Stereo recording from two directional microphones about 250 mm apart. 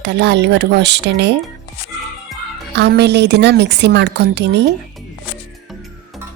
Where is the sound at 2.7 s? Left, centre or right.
Right.